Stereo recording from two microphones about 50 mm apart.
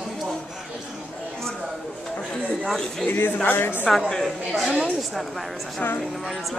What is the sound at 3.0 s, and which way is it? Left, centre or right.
Speech, left.